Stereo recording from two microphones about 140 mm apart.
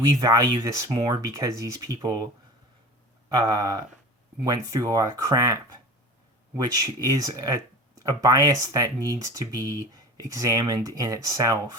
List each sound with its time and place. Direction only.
0.2 s speech: 25° right (ahead or behind)
3.2 s speech: 25° right (ahead or behind)
6.6 s speech: 25° right (ahead or behind)